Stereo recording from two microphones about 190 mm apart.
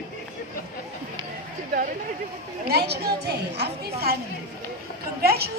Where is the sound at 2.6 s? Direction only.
60° right (ahead or behind).